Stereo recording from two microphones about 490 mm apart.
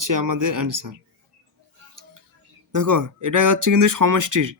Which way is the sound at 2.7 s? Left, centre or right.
Right.